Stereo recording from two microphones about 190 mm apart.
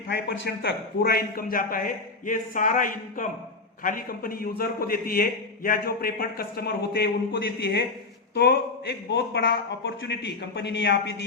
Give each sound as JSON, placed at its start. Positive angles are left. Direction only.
{"t": 0.3, "sound": "a man's voice", "side_deg": 55}